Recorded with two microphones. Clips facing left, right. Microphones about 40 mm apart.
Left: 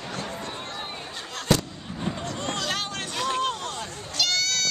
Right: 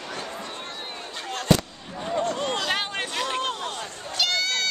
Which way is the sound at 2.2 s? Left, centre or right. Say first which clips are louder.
Right 5 dB; right.